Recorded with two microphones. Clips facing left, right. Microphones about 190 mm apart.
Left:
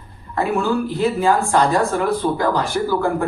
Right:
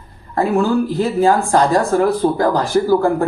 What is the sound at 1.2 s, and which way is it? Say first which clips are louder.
Speech: right 4 dB; 35° right (ahead or behind).